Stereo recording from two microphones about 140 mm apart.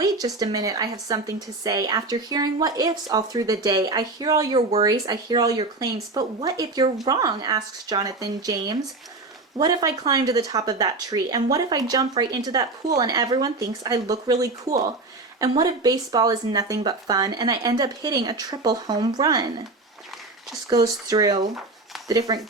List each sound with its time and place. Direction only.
0.0 s a woman's voice: 25° right (ahead or behind)
20.7 s a woman's voice: 25° right (ahead or behind)